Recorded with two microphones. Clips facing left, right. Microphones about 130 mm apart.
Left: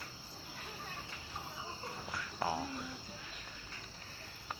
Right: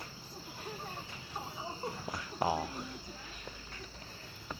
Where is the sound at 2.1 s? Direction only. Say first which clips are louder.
Right 4 dB; 20° right (ahead or behind).